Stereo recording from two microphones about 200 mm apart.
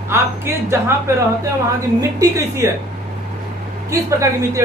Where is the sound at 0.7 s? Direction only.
15° right (ahead or behind).